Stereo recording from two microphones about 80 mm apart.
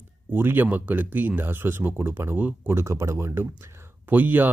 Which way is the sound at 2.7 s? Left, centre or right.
Right.